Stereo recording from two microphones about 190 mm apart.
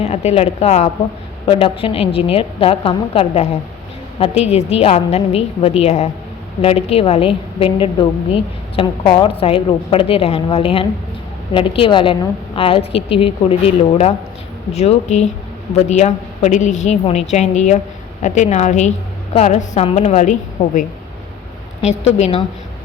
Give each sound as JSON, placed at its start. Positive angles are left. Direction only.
{"t": 0.0, "sound": "a woman's voice", "side_deg": 35}
{"t": 21.8, "sound": "a woman's voice", "side_deg": 35}